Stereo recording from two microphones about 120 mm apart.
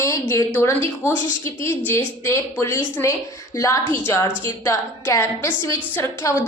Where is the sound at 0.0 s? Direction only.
25° left (ahead or behind).